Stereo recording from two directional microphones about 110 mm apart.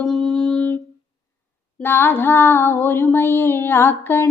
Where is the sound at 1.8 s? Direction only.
20° left (ahead or behind).